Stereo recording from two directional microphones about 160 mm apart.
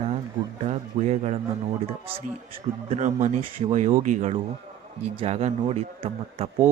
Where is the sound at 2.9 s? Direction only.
45° right (ahead or behind).